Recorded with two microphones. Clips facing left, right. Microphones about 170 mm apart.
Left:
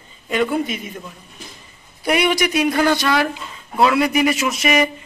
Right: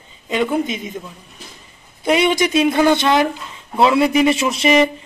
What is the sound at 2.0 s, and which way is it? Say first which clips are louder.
Speech: right 2 dB; 25° right (ahead or behind).